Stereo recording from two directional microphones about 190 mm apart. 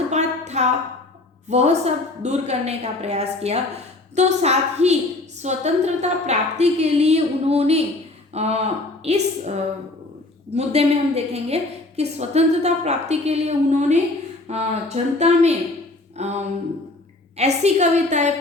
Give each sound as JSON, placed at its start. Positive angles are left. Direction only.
{"t": 0.1, "sound": "a sound", "side_deg": -35}
{"t": 1.5, "sound": "a woman's voice", "side_deg": -35}
{"t": 10.5, "sound": "a woman's voice", "side_deg": -35}